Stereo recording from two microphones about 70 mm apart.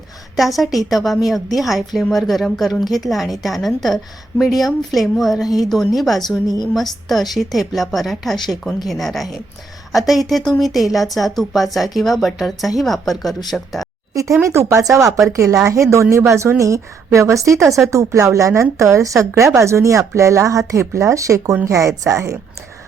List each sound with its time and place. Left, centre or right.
0.3 s a woman's voice: centre
14.1 s a woman's voice: right